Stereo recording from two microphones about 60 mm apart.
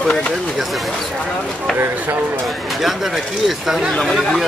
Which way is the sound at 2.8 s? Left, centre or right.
Centre.